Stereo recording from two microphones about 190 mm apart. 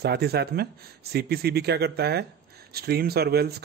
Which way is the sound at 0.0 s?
60° right (ahead or behind).